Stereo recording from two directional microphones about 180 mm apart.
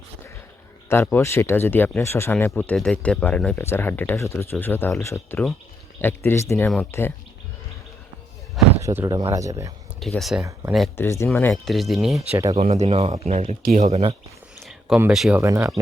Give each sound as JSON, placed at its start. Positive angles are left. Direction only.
{"t": 0.9, "sound": "speech", "side_deg": 10}
{"t": 8.8, "sound": "speech", "side_deg": -15}
{"t": 10.0, "sound": "speech", "side_deg": 0}
{"t": 10.9, "sound": "speech", "side_deg": 15}
{"t": 12.3, "sound": "speech", "side_deg": -15}
{"t": 12.5, "sound": "speech", "side_deg": -35}
{"t": 14.6, "sound": "a sound", "side_deg": -5}
{"t": 15.4, "sound": "speech", "side_deg": -15}